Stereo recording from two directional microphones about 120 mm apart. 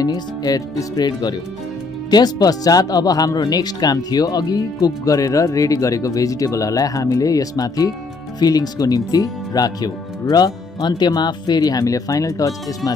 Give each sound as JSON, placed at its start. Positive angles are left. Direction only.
{"t": 0.0, "sound": "speech", "side_deg": 30}